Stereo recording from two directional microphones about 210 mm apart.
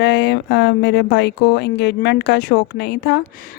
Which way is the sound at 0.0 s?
55° left (ahead or behind).